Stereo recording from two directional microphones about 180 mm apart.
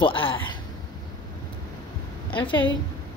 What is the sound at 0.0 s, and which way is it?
Speech, 30° left (ahead or behind).